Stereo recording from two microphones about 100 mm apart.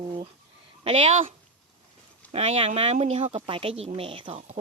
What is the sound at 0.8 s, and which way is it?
Speech, 80° right.